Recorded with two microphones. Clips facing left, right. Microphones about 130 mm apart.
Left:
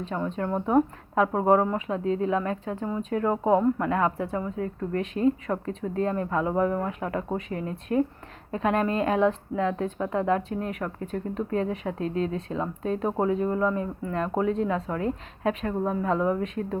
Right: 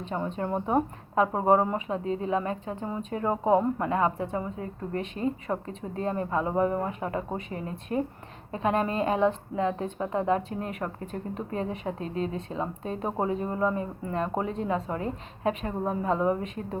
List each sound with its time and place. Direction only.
0.3 s speech: 10° right (ahead or behind)
5.5 s speech: 10° right (ahead or behind)